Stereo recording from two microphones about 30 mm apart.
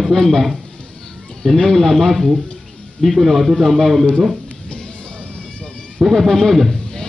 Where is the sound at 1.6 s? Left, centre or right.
Centre.